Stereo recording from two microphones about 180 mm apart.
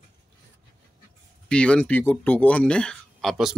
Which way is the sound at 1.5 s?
5° left (ahead or behind).